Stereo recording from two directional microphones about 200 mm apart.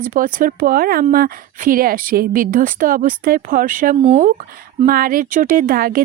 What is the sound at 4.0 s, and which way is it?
Speech, 30° right (ahead or behind).